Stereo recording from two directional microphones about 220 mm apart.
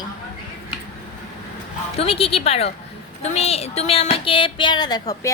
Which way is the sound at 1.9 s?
25° left (ahead or behind).